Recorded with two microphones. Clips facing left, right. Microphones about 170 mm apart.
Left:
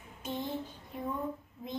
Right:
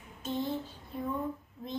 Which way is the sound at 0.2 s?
15° left (ahead or behind).